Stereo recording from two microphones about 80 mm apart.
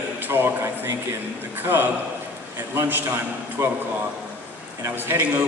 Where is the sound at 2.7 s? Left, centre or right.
Right.